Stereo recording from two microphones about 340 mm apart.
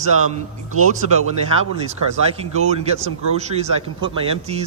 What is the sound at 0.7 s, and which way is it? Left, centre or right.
Speech, right.